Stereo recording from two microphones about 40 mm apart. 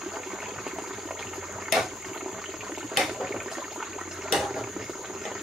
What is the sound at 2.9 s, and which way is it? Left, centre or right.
Water, centre.